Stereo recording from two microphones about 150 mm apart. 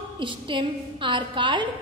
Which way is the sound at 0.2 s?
35° right (ahead or behind).